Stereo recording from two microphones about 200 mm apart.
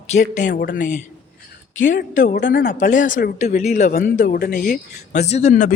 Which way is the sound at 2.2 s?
45° left (ahead or behind).